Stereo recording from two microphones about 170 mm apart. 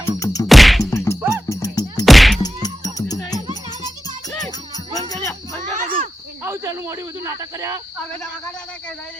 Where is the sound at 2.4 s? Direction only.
25° left (ahead or behind).